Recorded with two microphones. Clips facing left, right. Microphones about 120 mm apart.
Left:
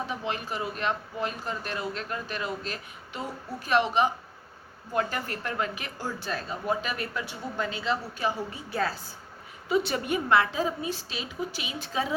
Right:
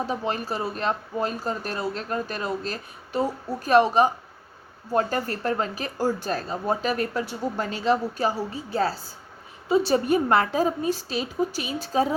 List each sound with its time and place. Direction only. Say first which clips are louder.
0.1 s speech: right 5 dB; 40° right (ahead or behind)
10.2 s speech: right 3 dB; 45° right (ahead or behind)